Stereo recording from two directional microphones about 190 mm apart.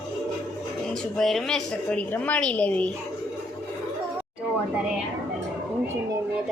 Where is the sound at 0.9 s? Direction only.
Centre (ahead or behind).